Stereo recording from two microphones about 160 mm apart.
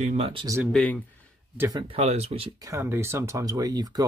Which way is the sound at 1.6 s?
25° right (ahead or behind).